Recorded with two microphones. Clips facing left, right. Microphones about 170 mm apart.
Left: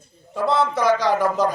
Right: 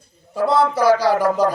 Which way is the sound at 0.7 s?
10° right (ahead or behind).